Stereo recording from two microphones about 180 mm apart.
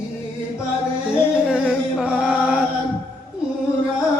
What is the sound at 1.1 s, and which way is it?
Music, 5° right (ahead or behind).